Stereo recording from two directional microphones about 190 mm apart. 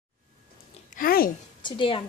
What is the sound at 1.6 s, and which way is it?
Speech, 25° left (ahead or behind).